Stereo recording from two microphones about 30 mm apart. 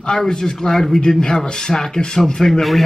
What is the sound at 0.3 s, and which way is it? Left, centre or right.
A man's voice, centre.